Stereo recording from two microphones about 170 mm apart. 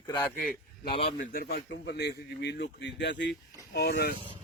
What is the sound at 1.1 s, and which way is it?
Speech, 60° left (ahead or behind).